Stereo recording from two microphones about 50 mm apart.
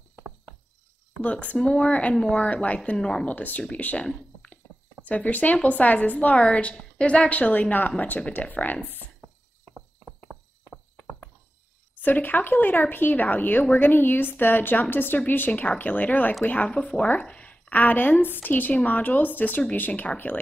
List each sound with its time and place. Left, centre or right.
1.2 s a woman's voice: left
3.0 s speech: centre
3.3 s a woman's voice: left
4.0 s a sound: left
5.0 s a woman's voice: left
6.5 s a woman's voice: centre
8.8 s a sound: left
9.8 s a sound: centre
11.9 s a woman's voice: left
16.6 s a woman's voice: left